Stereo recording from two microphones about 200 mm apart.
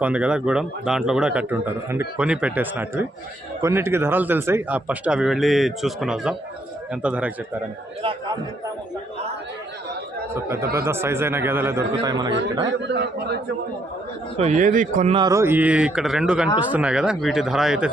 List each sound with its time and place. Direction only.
0.0 s a man's voice: 5° right (ahead or behind)
10.3 s a man's voice: 10° right (ahead or behind)
12.8 s a man's voice: 60° right (ahead or behind)
14.3 s a man's voice: 35° right (ahead or behind)
15.1 s a man's voice: 20° right (ahead or behind); by 17.8 s centre (ahead or behind)